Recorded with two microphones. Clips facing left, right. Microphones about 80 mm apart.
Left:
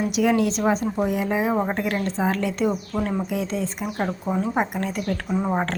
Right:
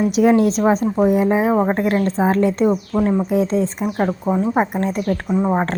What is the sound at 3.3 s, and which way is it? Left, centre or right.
Speech, right.